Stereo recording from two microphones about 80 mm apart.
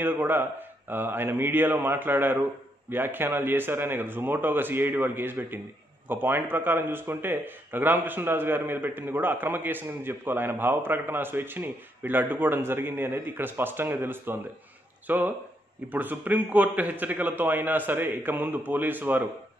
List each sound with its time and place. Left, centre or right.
0.0 s a man's voice: right